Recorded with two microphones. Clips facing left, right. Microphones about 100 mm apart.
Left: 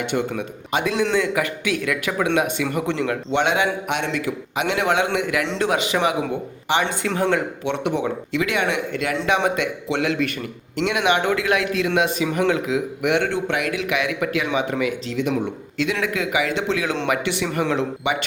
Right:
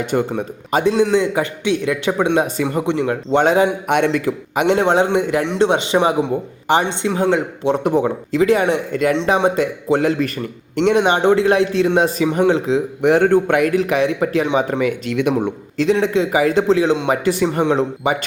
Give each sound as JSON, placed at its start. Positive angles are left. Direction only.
{"t": 0.0, "sound": "a man's voice", "side_deg": -40}
{"t": 3.3, "sound": "a man's voice", "side_deg": -35}
{"t": 3.8, "sound": "a man's voice", "side_deg": -50}
{"t": 6.7, "sound": "a man's voice", "side_deg": -45}
{"t": 7.0, "sound": "speech", "side_deg": -20}
{"t": 7.7, "sound": "a man's voice", "side_deg": -40}
{"t": 17.6, "sound": "speech", "side_deg": -25}
{"t": 18.0, "sound": "a man's voice", "side_deg": -40}